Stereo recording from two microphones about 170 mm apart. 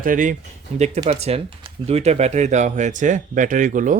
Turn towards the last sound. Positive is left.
turn(degrees=-50)  # may be behind; listen again after turning